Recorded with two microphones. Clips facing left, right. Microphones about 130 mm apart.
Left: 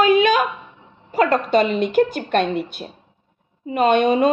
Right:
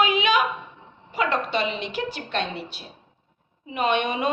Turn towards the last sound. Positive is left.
turn(degrees=40)  # may be behind; listen again after turning